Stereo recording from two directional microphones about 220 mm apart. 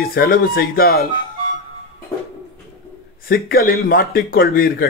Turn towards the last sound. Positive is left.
turn(degrees=40)  # may be behind; listen again after turning